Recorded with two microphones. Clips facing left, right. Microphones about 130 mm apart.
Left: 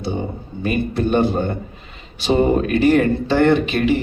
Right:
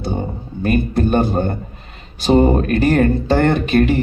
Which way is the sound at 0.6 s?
45° right (ahead or behind).